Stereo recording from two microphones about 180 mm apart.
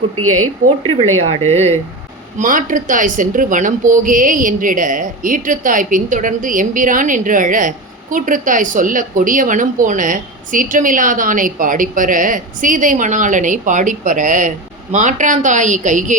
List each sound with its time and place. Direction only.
0.9 s speech: 35° right (ahead or behind)